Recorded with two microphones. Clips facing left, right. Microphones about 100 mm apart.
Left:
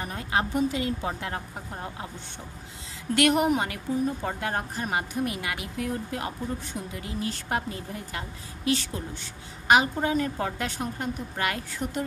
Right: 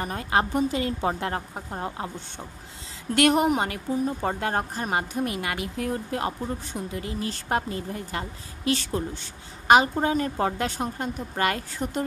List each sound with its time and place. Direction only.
0.0 s a woman's voice: 45° right (ahead or behind)
1.5 s speech: 30° right (ahead or behind)
3.2 s a woman's voice: 30° right (ahead or behind)